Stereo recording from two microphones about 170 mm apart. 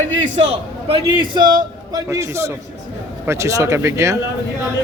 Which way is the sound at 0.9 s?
30° right (ahead or behind).